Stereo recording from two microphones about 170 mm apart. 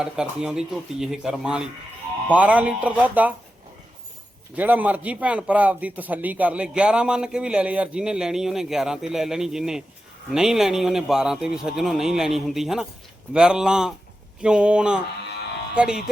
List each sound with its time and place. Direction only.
0.0 s a man's voice: 5° right (ahead or behind)
4.5 s a man's voice: 10° right (ahead or behind)